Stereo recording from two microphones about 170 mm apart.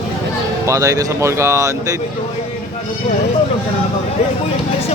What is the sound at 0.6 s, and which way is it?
Speech, 20° right (ahead or behind).